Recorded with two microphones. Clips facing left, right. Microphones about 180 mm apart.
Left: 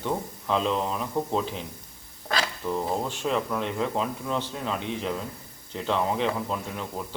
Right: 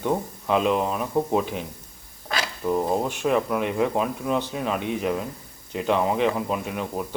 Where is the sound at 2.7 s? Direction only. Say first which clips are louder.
Right 6 dB; 15° right (ahead or behind).